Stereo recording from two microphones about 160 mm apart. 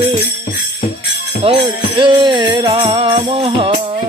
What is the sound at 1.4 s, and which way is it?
Music, 35° right (ahead or behind).